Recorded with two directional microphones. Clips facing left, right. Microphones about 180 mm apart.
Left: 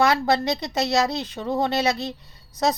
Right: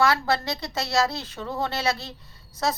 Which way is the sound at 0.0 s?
20° left (ahead or behind).